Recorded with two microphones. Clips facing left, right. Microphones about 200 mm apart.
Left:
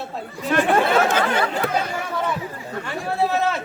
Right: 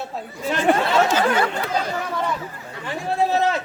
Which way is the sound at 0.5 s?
55° left (ahead or behind).